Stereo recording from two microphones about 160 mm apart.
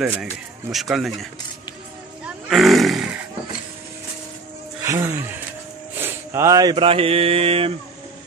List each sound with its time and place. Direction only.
0.0 s speech: 5° right (ahead or behind)
2.2 s a sound: centre (ahead or behind)
4.8 s speech: 20° right (ahead or behind)
5.9 s mantra: 15° right (ahead or behind); by 7.7 s 35° right (ahead or behind)